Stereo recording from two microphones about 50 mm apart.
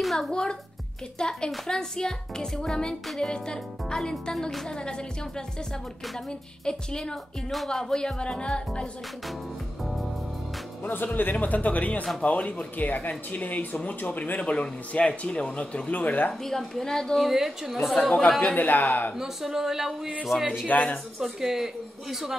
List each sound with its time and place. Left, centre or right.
0.0 s music: centre
0.3 s speech: centre
6.6 s a man's voice: centre
10.8 s a man's voice: left
15.9 s speech: left
16.4 s speech: centre
17.2 s a woman's voice: centre
18.6 s speech: left
19.1 s a man's voice: centre
20.3 s speech: left
20.6 s speech: left
21.2 s a man's voice: centre